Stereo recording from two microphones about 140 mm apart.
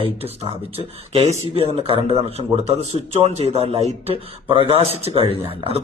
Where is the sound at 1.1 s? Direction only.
45° right (ahead or behind).